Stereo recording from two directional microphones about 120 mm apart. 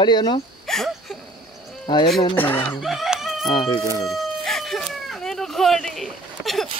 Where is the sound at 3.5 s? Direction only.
45° left (ahead or behind).